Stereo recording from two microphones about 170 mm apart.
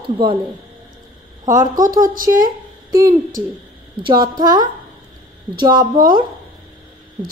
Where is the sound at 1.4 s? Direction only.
20° right (ahead or behind).